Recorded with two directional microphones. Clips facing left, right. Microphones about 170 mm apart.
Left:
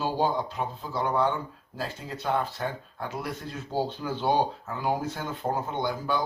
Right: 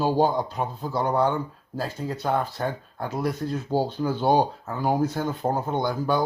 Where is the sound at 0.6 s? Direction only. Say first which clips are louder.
Right 3 dB; 45° right (ahead or behind).